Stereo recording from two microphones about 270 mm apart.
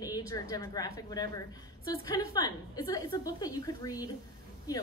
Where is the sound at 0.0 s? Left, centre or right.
Centre.